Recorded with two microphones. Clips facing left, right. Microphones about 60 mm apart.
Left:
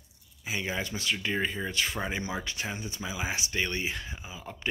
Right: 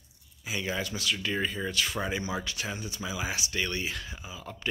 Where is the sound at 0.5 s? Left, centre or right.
Left.